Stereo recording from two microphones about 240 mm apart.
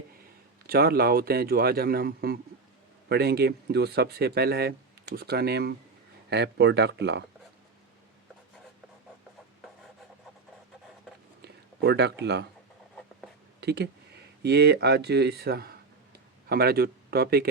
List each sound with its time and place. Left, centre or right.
0.7 s a man's voice: right
11.4 s speech: right
13.6 s speech: right